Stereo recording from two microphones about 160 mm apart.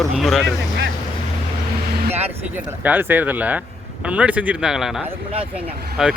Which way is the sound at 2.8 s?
10° right (ahead or behind).